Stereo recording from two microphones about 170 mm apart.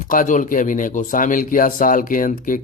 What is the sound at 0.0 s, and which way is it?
A man's voice, 50° left (ahead or behind).